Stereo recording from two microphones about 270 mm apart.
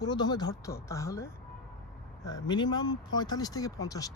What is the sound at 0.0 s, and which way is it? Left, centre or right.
Speech, centre.